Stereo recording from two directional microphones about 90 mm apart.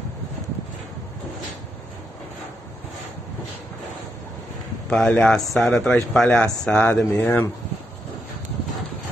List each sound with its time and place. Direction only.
4.8 s a man's voice: 10° left (ahead or behind)